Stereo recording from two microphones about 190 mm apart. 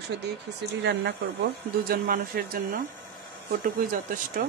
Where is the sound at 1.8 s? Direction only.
50° right (ahead or behind).